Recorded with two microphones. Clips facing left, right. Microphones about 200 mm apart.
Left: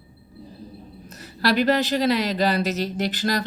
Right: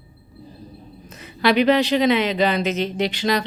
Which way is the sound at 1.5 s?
45° left (ahead or behind).